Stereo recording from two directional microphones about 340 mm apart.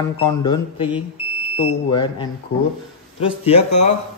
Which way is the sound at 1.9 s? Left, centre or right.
Centre.